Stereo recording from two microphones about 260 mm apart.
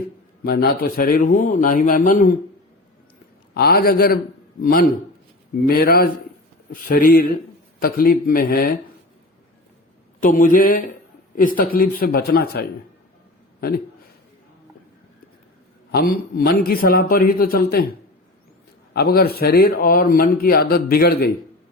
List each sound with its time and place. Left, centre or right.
0.4 s a man's voice: left
3.5 s a man's voice: left
10.2 s a man's voice: left
15.9 s a man's voice: left
18.9 s a man's voice: left